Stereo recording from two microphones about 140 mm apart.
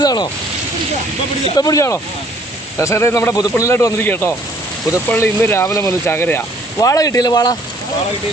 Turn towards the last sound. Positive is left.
turn(degrees=25)  # may be behind; listen again after turning